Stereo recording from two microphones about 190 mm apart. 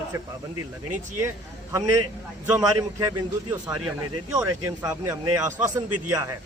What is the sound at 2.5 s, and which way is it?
A man's voice, 20° right (ahead or behind).